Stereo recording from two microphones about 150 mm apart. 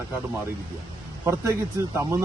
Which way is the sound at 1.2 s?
20° right (ahead or behind).